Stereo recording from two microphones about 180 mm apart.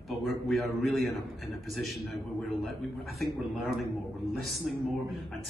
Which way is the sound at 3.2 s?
Centre (ahead or behind).